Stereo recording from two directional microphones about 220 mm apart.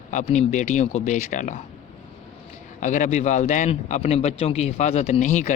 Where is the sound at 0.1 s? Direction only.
30° left (ahead or behind).